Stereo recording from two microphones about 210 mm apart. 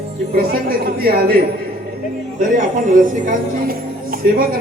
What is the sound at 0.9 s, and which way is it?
Speech, 45° right (ahead or behind).